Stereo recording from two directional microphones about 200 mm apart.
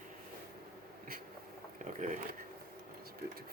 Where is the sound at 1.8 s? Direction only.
40° right (ahead or behind).